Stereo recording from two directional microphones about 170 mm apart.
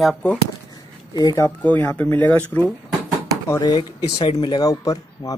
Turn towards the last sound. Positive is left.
turn(degrees=20)  # may be behind; listen again after turning